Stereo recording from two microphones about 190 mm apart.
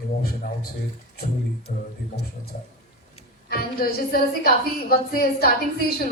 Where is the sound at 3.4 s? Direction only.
50° left (ahead or behind).